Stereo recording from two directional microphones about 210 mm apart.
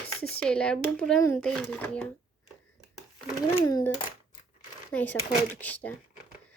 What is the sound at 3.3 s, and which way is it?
Speech, 15° left (ahead or behind).